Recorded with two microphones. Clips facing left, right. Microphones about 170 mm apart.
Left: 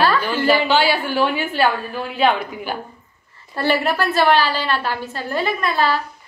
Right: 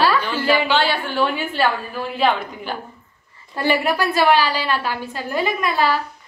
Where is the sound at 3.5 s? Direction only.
15° right (ahead or behind).